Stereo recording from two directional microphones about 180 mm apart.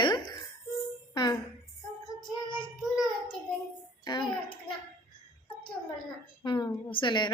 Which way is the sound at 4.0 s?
25° left (ahead or behind).